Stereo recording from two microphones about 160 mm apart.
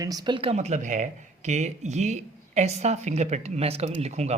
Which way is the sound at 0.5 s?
45° right (ahead or behind).